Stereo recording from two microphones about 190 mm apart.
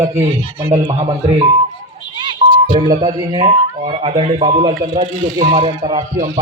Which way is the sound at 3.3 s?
30° right (ahead or behind).